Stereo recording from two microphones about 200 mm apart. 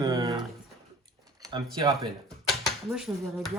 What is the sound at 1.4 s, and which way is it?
Speech, 20° right (ahead or behind).